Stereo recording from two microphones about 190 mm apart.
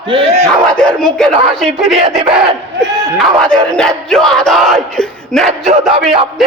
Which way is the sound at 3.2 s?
5° left (ahead or behind).